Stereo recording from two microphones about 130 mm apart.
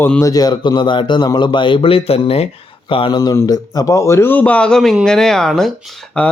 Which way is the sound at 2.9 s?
40° left (ahead or behind).